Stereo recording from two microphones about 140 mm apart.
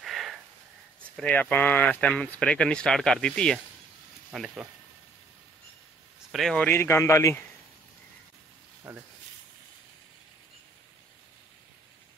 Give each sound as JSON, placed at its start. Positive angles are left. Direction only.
{"t": 0.0, "sound": "sniff", "side_deg": 0}
{"t": 1.1, "sound": "speech", "side_deg": 10}
{"t": 6.3, "sound": "speech", "side_deg": 5}
{"t": 6.7, "sound": "speech", "side_deg": 20}
{"t": 8.9, "sound": "speech", "side_deg": -15}